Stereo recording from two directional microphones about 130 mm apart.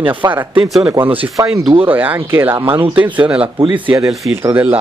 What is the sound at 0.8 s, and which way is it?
Speech, 15° right (ahead or behind).